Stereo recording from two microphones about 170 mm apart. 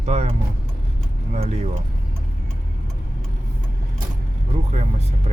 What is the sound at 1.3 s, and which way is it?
Speech, 40° right (ahead or behind).